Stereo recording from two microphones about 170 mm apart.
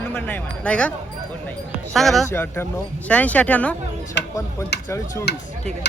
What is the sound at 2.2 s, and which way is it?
Speech, 15° left (ahead or behind).